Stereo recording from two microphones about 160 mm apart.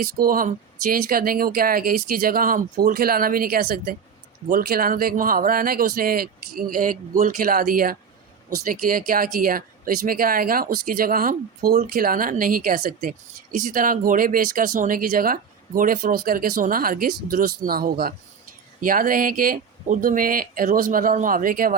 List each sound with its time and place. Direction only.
0.0 s speech: 65° right (ahead or behind)